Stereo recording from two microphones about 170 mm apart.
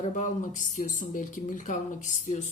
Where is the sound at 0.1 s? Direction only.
45° left (ahead or behind).